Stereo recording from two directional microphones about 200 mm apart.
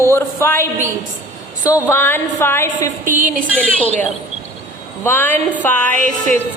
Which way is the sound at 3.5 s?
5° left (ahead or behind).